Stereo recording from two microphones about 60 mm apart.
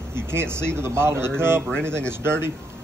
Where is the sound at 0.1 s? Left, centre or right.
Right.